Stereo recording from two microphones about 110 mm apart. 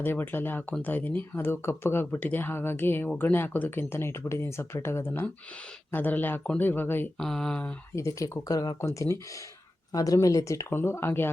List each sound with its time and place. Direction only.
0.0 s speech: 20° left (ahead or behind)
7.2 s speech: 5° left (ahead or behind)
7.9 s speech: 30° left (ahead or behind)